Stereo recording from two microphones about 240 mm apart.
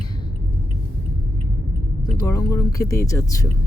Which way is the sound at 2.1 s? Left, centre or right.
Centre.